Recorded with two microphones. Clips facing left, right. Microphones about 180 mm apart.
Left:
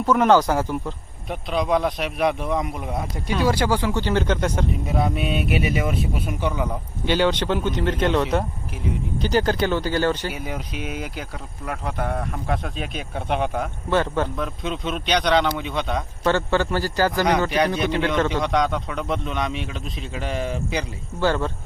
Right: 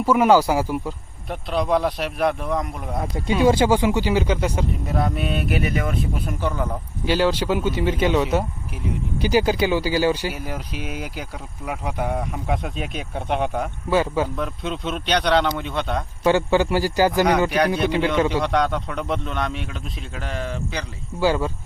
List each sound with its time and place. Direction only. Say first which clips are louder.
0.0 s speech: right 1 dB; 10° right (ahead or behind)
3.4 s a man's voice: right 4 dB; 20° right (ahead or behind)
5.1 s speech: left 1 dB; 20° left (ahead or behind)
6.5 s speech: even; 5° left (ahead or behind)
16.2 s a man's voice: right 3 dB; 15° right (ahead or behind)
18.6 s speech: even; 5° left (ahead or behind)
21.2 s a man's voice: right 1 dB; 10° right (ahead or behind)